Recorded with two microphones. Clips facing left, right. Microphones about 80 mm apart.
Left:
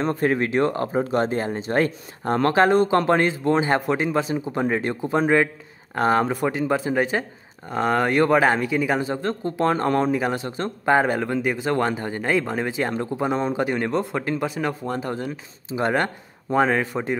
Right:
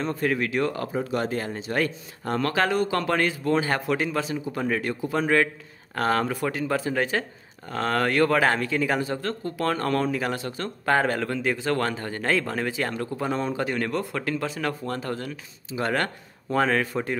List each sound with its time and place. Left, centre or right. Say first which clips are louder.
0.0 s speech: left 4 dB; left